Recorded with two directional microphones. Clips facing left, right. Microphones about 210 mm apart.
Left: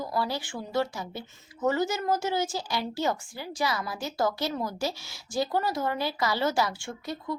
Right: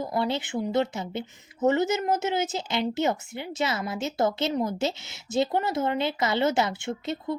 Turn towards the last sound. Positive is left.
turn(degrees=-25)  # may be behind; listen again after turning